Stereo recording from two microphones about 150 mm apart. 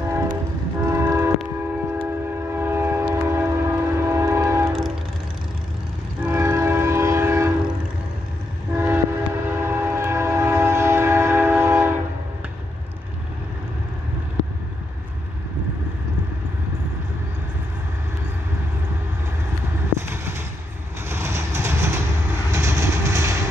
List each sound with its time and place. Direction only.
0.0 s train: 20° right (ahead or behind)
6.2 s train: 15° right (ahead or behind)
8.7 s train: 15° right (ahead or behind)
20.1 s a sound: 15° right (ahead or behind)
21.1 s vehicle: 15° right (ahead or behind)